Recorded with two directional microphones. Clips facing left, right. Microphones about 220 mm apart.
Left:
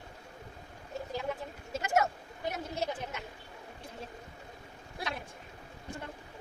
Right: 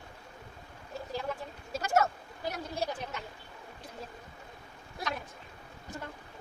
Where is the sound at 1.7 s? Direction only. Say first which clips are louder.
Right 1 dB; 20° left (ahead or behind).